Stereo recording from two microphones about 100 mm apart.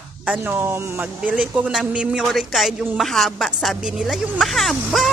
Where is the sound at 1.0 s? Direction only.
15° right (ahead or behind).